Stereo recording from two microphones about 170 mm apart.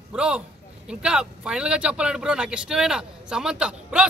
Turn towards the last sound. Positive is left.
turn(degrees=-5)  # may be behind; listen again after turning